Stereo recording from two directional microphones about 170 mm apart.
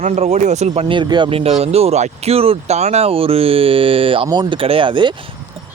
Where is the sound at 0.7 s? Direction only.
30° right (ahead or behind).